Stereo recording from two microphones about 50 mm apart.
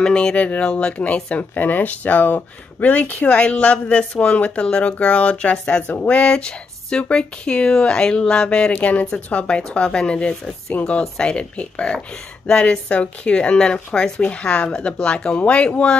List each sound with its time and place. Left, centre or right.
0.0 s speech: centre